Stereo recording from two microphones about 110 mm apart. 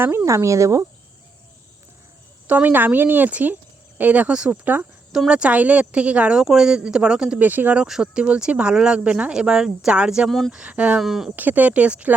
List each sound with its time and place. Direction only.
0.0 s speech: 20° right (ahead or behind)
2.5 s speech: 15° right (ahead or behind); by 10.6 s 5° left (ahead or behind)
10.6 s speech: 10° right (ahead or behind)
11.3 s speech: 15° right (ahead or behind)